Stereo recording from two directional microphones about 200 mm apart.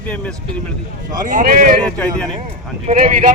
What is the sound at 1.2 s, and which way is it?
Speech, 40° right (ahead or behind).